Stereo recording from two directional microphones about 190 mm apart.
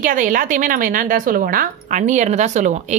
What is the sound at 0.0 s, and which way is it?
A woman's voice, 45° right (ahead or behind).